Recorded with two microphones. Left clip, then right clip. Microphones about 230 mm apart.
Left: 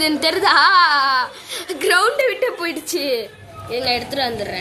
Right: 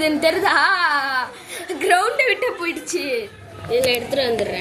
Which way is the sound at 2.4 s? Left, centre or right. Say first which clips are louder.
Left 2 dB; left.